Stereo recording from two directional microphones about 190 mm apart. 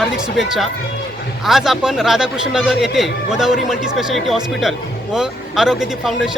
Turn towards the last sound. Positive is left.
turn(degrees=0)  # may be behind; listen again after turning